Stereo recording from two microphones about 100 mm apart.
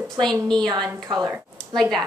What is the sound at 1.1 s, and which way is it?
Speech, 60° right (ahead or behind).